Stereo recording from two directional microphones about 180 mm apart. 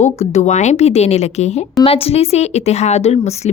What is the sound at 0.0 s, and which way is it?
Speech, 40° left (ahead or behind).